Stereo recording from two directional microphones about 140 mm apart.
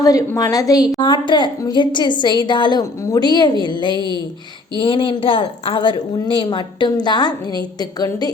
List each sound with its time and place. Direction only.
0.0 s a woman's voice: 25° left (ahead or behind)